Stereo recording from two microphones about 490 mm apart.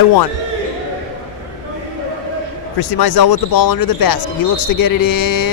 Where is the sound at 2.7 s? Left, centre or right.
Left.